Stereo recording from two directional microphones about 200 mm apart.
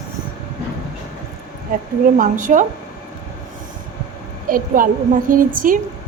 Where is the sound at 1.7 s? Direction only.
45° right (ahead or behind).